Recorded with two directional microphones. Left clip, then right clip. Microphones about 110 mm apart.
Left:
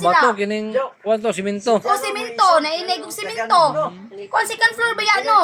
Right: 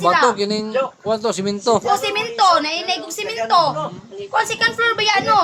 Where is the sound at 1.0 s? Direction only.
15° right (ahead or behind).